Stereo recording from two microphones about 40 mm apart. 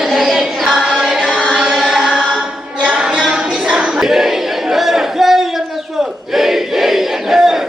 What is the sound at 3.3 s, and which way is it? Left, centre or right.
Music, centre.